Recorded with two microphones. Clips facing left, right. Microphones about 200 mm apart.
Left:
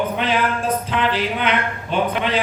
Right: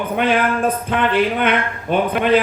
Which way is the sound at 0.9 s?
55° right (ahead or behind).